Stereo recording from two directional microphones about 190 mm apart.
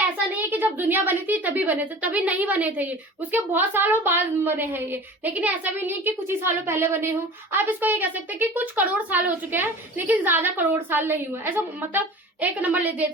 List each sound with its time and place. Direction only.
0.3 s a woman's voice: 10° right (ahead or behind)